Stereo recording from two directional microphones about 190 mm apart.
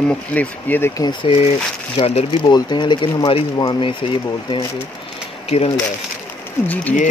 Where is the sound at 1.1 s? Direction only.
25° left (ahead or behind).